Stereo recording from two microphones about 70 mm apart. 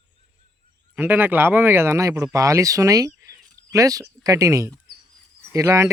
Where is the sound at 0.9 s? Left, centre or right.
Right.